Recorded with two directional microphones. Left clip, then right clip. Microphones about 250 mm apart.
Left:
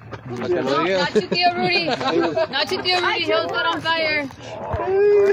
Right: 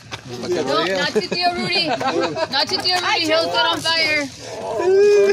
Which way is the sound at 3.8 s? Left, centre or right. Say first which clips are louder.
Right 2 dB; left.